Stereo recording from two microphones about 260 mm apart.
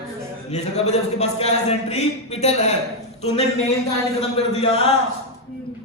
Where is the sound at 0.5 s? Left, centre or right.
Left.